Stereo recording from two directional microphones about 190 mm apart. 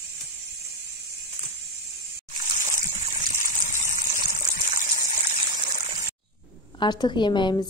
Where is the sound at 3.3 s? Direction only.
40° right (ahead or behind).